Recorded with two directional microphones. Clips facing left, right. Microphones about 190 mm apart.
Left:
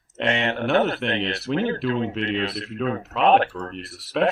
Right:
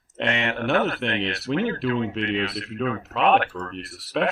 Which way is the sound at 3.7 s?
Centre (ahead or behind).